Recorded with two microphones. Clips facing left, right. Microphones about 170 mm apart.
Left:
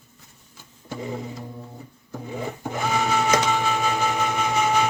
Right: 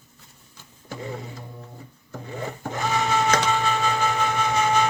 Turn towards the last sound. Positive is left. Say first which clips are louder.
# even
turn(degrees=10)  # may be behind; listen again after turning